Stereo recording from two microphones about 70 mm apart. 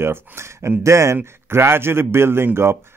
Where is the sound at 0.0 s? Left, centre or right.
Right.